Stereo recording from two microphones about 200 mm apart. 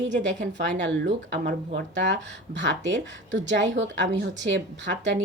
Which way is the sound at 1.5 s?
40° right (ahead or behind).